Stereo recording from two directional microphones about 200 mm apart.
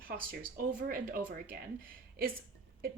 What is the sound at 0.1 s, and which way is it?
Speech, 45° right (ahead or behind).